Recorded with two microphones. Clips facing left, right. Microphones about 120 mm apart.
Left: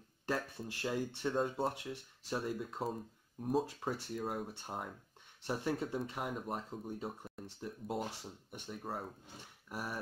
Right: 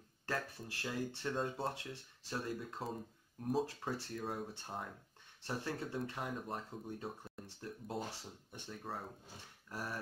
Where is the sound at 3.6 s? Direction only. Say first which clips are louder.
Left 2 dB; 15° left (ahead or behind).